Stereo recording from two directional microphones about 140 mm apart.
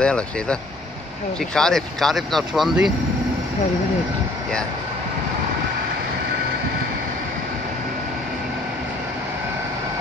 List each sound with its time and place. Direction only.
0.0 s speech: 5° left (ahead or behind)